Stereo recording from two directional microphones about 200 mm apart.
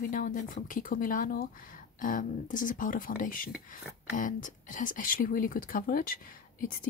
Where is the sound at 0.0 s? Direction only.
40° left (ahead or behind).